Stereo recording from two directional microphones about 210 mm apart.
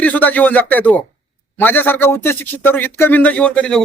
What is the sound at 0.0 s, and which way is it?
A man's voice, 10° left (ahead or behind).